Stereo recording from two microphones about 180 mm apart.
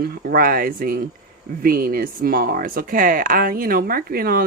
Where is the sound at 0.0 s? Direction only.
55° right (ahead or behind).